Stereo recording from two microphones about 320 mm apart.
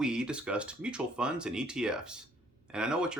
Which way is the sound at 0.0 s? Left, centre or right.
Centre.